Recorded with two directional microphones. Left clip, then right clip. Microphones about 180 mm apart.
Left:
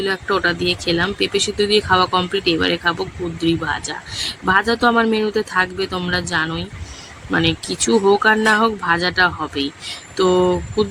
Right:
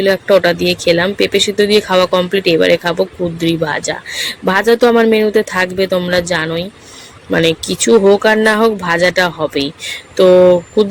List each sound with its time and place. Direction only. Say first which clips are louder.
0.0 s speech: right 8 dB; 10° right (ahead or behind)